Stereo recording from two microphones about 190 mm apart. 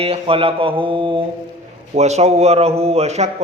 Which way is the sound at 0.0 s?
30° right (ahead or behind).